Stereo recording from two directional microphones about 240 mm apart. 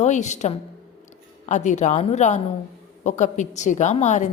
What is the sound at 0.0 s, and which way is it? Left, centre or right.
A woman's voice, left.